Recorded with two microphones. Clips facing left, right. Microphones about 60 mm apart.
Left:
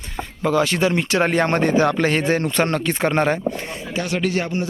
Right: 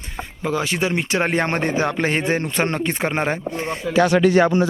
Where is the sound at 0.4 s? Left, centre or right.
Centre.